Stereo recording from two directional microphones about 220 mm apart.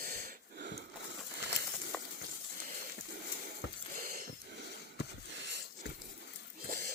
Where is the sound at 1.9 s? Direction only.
5° left (ahead or behind).